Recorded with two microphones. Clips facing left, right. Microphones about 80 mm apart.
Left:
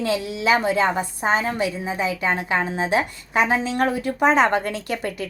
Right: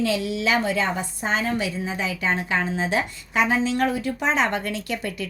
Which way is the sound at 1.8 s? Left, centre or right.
Centre.